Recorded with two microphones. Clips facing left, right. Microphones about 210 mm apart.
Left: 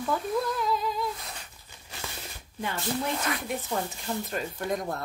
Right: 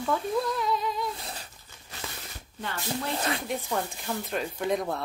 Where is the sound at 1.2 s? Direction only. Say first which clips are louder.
Right 3 dB; 30° right (ahead or behind).